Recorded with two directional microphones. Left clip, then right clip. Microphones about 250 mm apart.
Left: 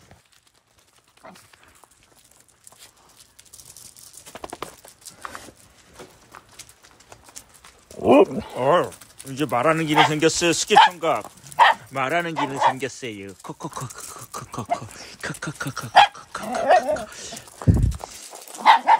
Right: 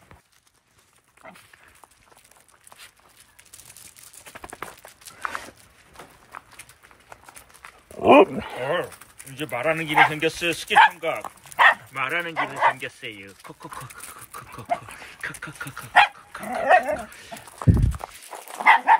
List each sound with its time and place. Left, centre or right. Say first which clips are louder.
1.2 s speech: even; centre
4.3 s a sound: left 3 dB; left
8.0 s speech: right 1 dB; centre
13.9 s dog: left 4 dB; centre
16.5 s speech: left 1 dB; centre
18.6 s dog: left 1 dB; left